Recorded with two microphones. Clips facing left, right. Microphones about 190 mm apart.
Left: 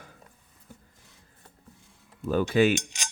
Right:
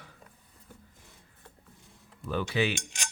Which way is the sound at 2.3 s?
45° left (ahead or behind).